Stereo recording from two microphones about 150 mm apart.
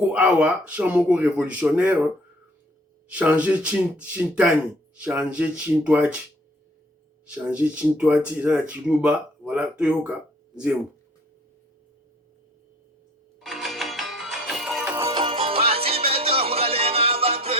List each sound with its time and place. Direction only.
0.1 s speech: 10° right (ahead or behind)
3.1 s speech: 10° right (ahead or behind)
7.3 s speech: 10° right (ahead or behind)
13.4 s music: centre (ahead or behind)
14.9 s music: 20° right (ahead or behind)
15.2 s music: 35° right (ahead or behind)